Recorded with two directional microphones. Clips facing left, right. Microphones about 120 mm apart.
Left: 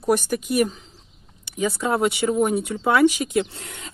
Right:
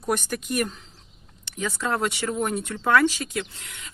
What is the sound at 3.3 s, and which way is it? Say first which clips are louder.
Speech: left 8 dB; 35° left (ahead or behind).